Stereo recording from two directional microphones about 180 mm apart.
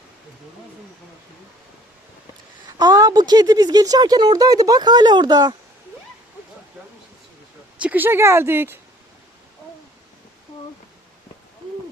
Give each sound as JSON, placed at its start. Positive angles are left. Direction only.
{"t": 2.7, "sound": "speech", "side_deg": -20}
{"t": 7.8, "sound": "speech", "side_deg": -10}